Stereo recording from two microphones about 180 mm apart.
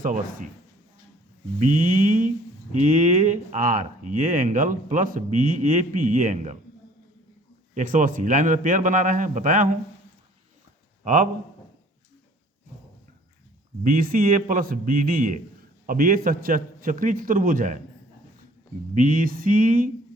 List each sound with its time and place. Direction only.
0.0 s speech: 45° right (ahead or behind)
1.5 s speech: 45° right (ahead or behind)
7.7 s speech: 45° right (ahead or behind)
11.0 s a man's voice: 45° right (ahead or behind)
13.8 s speech: 50° right (ahead or behind)
18.9 s speech: 50° right (ahead or behind)